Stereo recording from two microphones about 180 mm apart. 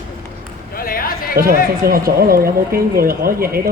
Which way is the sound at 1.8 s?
55° right (ahead or behind).